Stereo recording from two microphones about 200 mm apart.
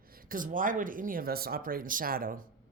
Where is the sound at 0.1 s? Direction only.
45° right (ahead or behind).